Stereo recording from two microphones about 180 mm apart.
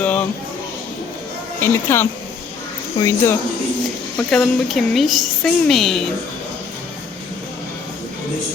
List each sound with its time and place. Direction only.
0.0 s a sound: 10° left (ahead or behind)
1.6 s speech: 15° left (ahead or behind)
4.2 s a woman's voice: 5° left (ahead or behind)